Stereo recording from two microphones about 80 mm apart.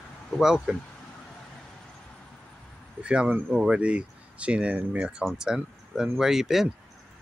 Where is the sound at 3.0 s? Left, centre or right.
Centre.